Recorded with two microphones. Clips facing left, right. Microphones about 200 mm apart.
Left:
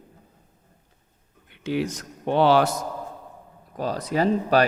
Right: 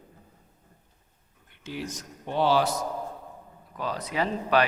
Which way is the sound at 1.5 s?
70° left (ahead or behind).